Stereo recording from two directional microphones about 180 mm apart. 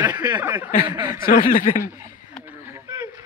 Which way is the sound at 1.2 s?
50° left (ahead or behind).